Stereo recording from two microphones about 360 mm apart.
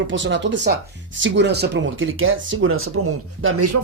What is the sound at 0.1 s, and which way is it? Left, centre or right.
Speech, right.